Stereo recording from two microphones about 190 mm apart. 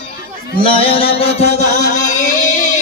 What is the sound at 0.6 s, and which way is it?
Music, 30° left (ahead or behind).